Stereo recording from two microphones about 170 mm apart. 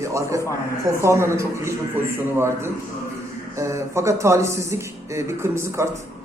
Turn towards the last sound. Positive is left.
turn(degrees=-15)  # may be behind; listen again after turning